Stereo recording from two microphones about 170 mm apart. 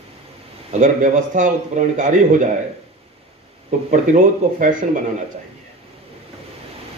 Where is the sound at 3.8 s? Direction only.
50° right (ahead or behind).